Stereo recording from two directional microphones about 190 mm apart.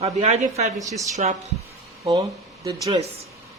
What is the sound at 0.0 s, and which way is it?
Speech, 35° right (ahead or behind).